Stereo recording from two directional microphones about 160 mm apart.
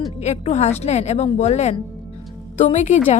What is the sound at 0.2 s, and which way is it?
A woman's voice, 45° left (ahead or behind).